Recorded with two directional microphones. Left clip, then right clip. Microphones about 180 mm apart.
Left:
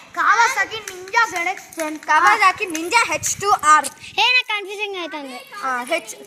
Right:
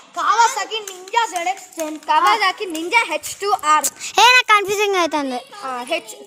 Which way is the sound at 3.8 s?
40° right (ahead or behind).